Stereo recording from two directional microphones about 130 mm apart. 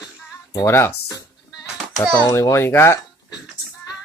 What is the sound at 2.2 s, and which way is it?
Speech, 20° left (ahead or behind).